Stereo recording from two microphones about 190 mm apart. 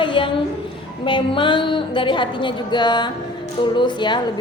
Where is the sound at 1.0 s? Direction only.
25° left (ahead or behind).